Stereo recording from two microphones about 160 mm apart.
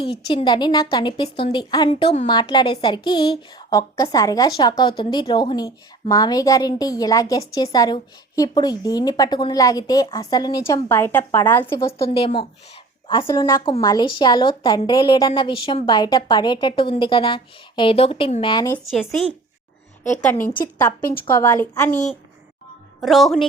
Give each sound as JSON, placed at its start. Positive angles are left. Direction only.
{"t": 0.0, "sound": "a woman's voice", "side_deg": 35}
{"t": 12.1, "sound": "a woman's voice", "side_deg": 35}
{"t": 18.9, "sound": "speech", "side_deg": 0}
{"t": 20.4, "sound": "a woman's voice", "side_deg": 60}
{"t": 21.2, "sound": "a woman's voice", "side_deg": 15}
{"t": 23.0, "sound": "speech", "side_deg": 0}